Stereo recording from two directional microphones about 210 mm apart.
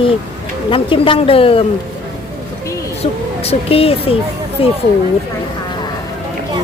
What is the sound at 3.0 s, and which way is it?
Speech, 30° left (ahead or behind).